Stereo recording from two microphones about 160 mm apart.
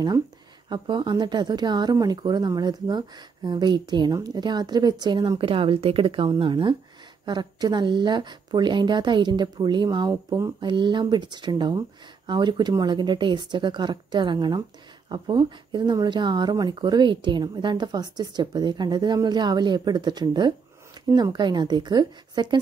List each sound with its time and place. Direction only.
0.7 s a woman's voice: 30° right (ahead or behind)